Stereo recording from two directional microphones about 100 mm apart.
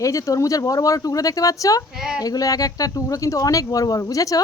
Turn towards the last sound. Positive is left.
turn(degrees=35)  # may be behind; listen again after turning